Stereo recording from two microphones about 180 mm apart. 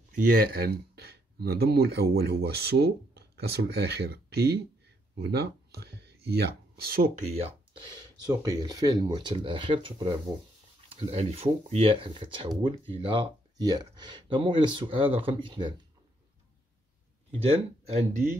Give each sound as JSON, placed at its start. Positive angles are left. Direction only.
{"t": 0.1, "sound": "speech", "side_deg": -55}
{"t": 8.3, "sound": "speech", "side_deg": -20}
{"t": 17.5, "sound": "speech", "side_deg": -35}